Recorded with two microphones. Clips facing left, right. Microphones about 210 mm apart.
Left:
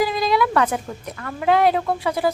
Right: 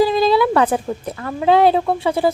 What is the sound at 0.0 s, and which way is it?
A woman's voice, 30° right (ahead or behind).